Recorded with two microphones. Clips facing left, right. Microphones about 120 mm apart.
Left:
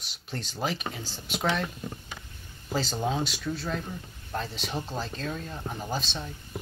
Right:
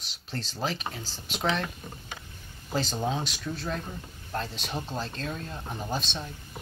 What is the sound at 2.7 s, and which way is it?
Speech, 5° left (ahead or behind).